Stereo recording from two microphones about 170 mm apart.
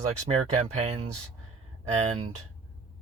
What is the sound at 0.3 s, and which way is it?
Speech, 40° right (ahead or behind).